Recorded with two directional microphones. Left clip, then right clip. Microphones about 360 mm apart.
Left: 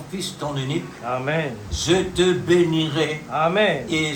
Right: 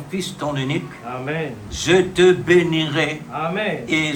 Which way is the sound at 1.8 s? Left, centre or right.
Right.